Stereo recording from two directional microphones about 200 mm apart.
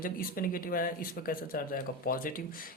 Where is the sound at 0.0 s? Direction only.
45° left (ahead or behind).